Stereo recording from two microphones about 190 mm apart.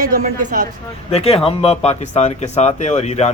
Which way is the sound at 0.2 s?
40° right (ahead or behind).